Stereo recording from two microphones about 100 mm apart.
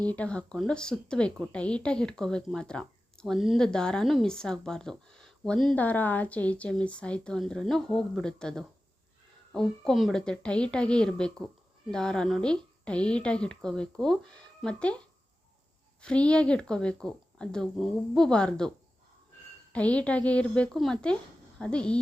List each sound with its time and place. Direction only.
0.1 s speech: 10° left (ahead or behind)
5.7 s speech: 15° left (ahead or behind)
19.7 s speech: 15° left (ahead or behind)